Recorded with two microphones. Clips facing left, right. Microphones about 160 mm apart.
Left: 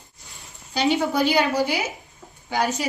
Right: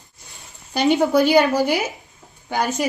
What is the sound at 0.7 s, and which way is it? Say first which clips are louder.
A woman's voice: right 5 dB; 50° right (ahead or behind).